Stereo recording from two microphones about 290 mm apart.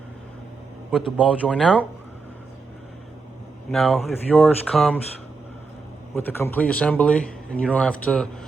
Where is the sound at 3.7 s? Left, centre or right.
Centre.